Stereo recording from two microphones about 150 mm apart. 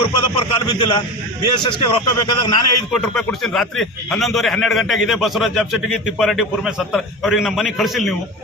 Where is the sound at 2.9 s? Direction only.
Centre (ahead or behind).